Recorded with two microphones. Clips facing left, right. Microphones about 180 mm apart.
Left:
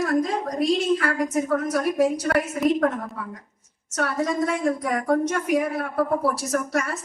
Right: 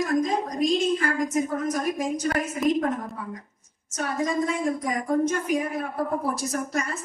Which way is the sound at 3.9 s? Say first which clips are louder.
Left 2 dB; 70° left (ahead or behind).